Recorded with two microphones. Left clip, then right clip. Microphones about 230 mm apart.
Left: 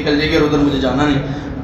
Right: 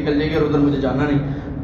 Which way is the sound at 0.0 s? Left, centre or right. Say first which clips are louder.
Left 4 dB; left.